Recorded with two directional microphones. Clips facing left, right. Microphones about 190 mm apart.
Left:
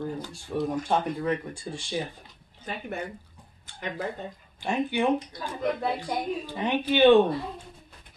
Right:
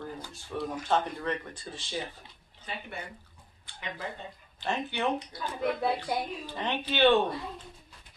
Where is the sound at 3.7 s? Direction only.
45° left (ahead or behind).